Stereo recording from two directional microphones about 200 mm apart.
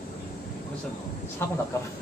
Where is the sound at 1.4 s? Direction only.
10° left (ahead or behind).